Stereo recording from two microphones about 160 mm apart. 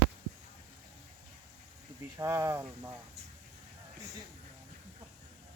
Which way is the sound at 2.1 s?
20° right (ahead or behind).